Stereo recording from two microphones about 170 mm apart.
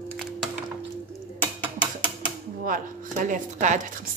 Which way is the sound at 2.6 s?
50° right (ahead or behind).